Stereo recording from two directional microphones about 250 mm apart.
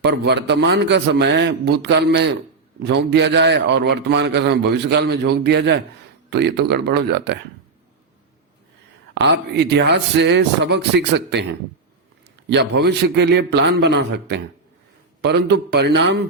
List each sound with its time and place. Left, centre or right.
0.0 s a man's voice: right
9.1 s a man's voice: right
12.5 s a man's voice: right